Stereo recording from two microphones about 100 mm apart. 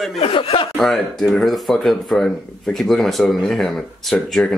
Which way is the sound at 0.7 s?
5° left (ahead or behind).